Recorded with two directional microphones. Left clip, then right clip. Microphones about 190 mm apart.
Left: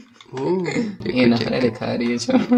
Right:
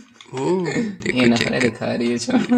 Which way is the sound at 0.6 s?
20° right (ahead or behind).